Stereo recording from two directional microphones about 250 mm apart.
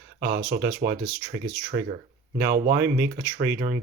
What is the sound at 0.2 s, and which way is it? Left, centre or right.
Speech, right.